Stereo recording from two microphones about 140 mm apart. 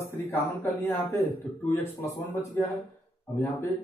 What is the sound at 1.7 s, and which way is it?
A man's voice, 20° left (ahead or behind).